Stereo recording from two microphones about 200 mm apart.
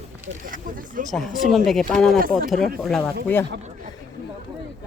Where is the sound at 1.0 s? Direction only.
Centre (ahead or behind).